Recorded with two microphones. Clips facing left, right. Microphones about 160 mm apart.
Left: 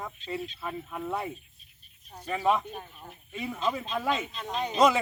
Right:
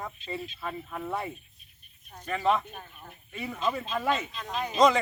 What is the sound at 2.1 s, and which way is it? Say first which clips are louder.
Speech: even; 10° left (ahead or behind).